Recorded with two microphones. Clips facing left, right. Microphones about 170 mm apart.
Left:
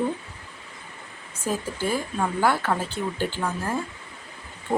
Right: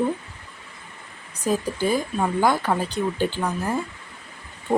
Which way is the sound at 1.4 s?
15° right (ahead or behind).